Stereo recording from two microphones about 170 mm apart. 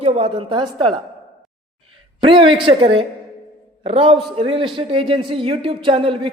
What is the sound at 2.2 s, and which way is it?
A man's voice, 30° right (ahead or behind).